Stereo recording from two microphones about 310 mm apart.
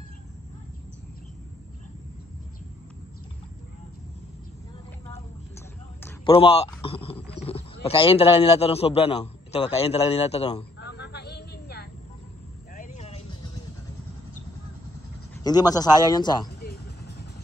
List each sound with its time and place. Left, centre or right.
6.0 s a sound: centre
7.4 s speech: centre
10.8 s vehicle: left
15.4 s a man's voice: centre
16.6 s vehicle: left